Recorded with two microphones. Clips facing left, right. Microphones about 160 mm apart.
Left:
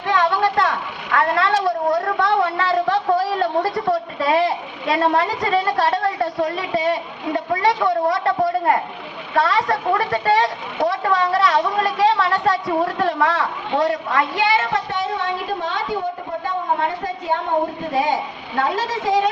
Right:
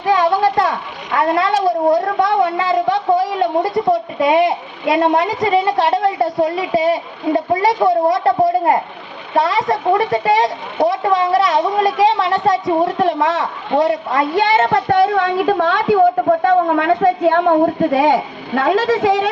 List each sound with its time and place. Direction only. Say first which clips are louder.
0.0 s a sound: right 4 dB; 25° right (ahead or behind)
1.1 s a woman's voice: right 3 dB; 20° right (ahead or behind)
14.3 s a woman's voice: right 5 dB; 45° right (ahead or behind); by 15.8 s 80° right
16.5 s a woman's voice: right 9 dB; 90° right